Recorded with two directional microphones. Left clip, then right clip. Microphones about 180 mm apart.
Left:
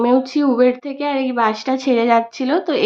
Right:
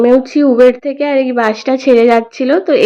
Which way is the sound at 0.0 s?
15° right (ahead or behind).